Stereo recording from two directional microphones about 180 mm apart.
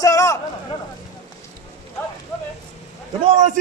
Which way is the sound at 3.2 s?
40° right (ahead or behind).